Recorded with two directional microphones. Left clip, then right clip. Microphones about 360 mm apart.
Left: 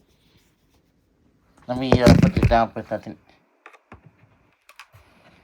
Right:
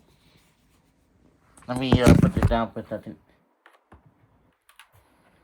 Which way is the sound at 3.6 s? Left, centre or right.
Left.